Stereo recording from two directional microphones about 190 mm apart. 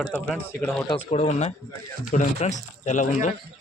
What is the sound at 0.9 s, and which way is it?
Speech, 35° left (ahead or behind).